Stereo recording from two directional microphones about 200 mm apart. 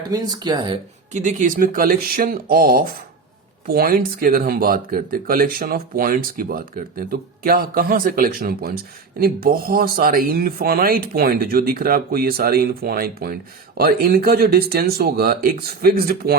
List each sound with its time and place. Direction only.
0.1 s speech: 20° right (ahead or behind)
1.1 s speech: 40° right (ahead or behind)